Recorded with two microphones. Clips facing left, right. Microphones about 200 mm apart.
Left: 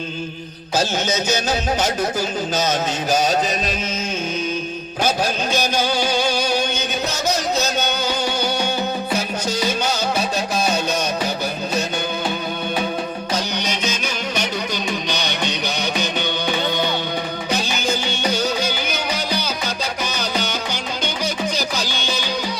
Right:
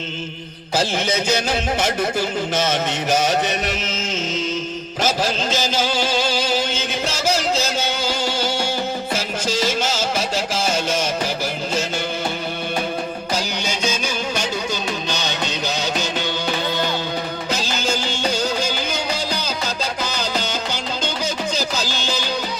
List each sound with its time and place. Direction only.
5.0 s a sound: 90° right
9.9 s music: 90° right
13.3 s music: 10° right (ahead or behind)